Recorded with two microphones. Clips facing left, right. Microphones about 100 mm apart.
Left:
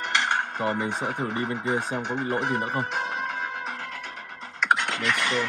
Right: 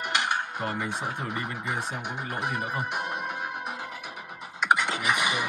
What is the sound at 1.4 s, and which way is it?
Speech, 30° left (ahead or behind).